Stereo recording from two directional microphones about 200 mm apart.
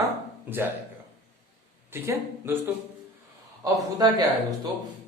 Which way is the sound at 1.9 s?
10° right (ahead or behind).